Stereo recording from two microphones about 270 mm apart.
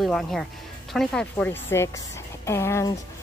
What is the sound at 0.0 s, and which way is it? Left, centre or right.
Speech, centre.